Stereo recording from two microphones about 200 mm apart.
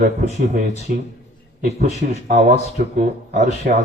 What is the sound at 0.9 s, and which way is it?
Speech, 55° right (ahead or behind).